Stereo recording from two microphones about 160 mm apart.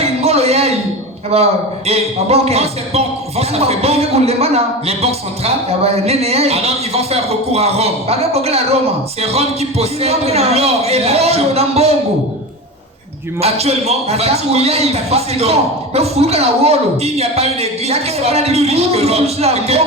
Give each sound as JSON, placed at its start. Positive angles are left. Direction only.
{"t": 0.0, "sound": "a sound", "side_deg": -40}
{"t": 1.3, "sound": "speech", "side_deg": -40}
{"t": 13.4, "sound": "speech", "side_deg": -40}